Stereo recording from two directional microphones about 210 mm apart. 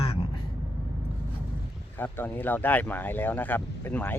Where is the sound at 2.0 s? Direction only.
10° left (ahead or behind).